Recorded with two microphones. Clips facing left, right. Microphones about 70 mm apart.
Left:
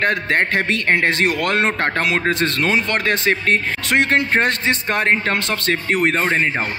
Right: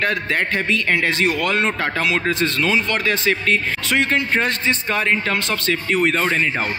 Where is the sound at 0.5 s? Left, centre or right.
Left.